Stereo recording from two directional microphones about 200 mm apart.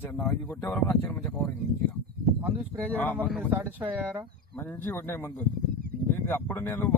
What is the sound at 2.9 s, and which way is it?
Speech, 10° left (ahead or behind).